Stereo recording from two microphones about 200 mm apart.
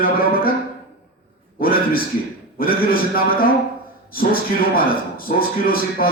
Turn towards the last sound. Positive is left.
turn(degrees=45)  # may be behind; listen again after turning